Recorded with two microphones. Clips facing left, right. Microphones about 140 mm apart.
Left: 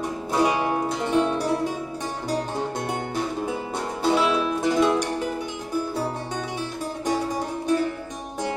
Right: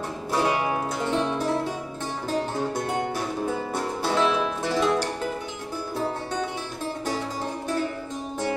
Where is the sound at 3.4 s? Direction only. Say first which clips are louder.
Right 1 dB; 20° left (ahead or behind).